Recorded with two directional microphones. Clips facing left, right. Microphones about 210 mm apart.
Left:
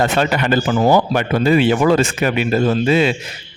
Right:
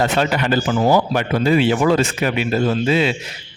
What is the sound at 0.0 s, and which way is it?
Speech, 55° left (ahead or behind).